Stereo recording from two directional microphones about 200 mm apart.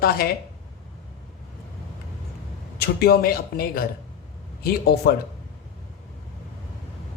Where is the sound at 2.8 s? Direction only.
50° left (ahead or behind).